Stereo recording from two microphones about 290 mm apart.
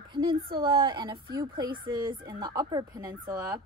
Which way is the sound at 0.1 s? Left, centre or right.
Centre.